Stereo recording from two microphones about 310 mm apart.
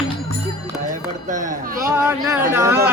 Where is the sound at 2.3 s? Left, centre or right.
Centre.